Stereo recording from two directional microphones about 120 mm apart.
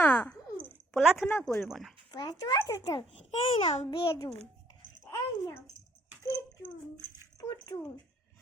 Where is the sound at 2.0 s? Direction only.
35° left (ahead or behind).